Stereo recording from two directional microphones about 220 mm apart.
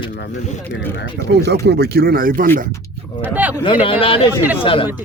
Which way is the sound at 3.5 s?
20° left (ahead or behind).